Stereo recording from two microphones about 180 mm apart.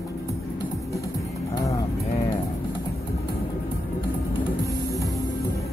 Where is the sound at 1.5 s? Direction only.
20° left (ahead or behind).